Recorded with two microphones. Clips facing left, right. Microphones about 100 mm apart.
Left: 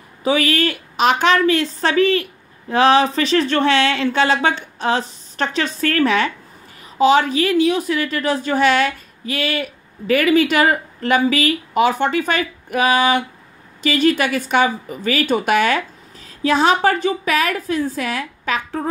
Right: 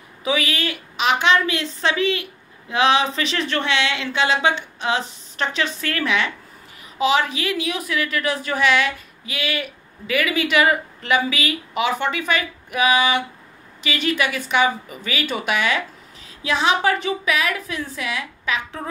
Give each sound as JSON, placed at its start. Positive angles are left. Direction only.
{"t": 0.2, "sound": "a woman's voice", "side_deg": 40}